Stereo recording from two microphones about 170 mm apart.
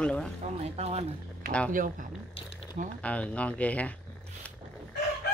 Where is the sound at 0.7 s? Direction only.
40° right (ahead or behind).